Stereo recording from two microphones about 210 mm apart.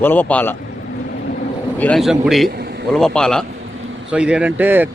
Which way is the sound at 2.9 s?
5° left (ahead or behind).